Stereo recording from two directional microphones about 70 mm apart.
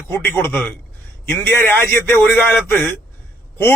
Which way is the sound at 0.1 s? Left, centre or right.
Left.